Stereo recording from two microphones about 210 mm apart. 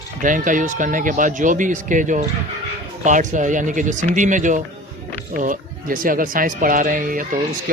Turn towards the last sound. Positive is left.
turn(degrees=-40)  # may be behind; listen again after turning